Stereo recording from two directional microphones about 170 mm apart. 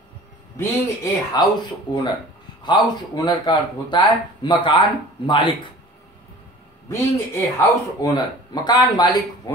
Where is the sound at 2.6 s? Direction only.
25° left (ahead or behind).